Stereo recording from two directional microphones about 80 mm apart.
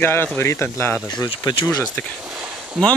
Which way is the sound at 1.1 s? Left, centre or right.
Left.